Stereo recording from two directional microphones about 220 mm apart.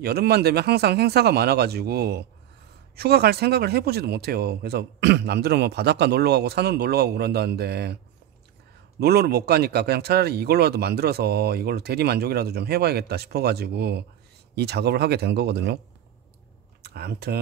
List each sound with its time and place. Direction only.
0.0 s speech: 45° right (ahead or behind)
9.0 s speech: 45° right (ahead or behind)
16.8 s speech: 45° right (ahead or behind)